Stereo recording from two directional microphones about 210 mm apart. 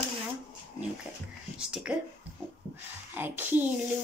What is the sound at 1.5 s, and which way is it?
Speech, 5° right (ahead or behind).